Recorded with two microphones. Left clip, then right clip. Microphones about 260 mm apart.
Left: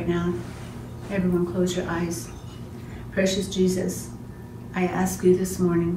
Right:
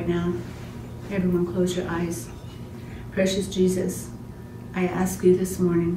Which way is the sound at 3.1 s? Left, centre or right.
Centre.